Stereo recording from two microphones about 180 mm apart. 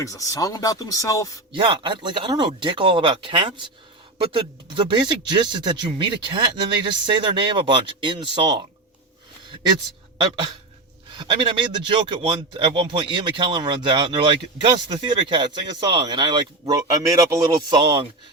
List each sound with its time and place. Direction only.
0.0 s speech: 20° left (ahead or behind)
1.6 s speech: 25° right (ahead or behind)
10.2 s speech: 25° right (ahead or behind)